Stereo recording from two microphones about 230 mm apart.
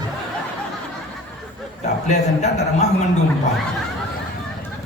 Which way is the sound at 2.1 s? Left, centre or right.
Left.